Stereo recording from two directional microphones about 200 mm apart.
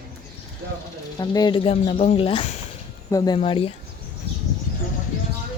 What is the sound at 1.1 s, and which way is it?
Speech, 20° left (ahead or behind).